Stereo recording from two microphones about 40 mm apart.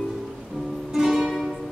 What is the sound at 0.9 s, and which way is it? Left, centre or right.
Music, centre.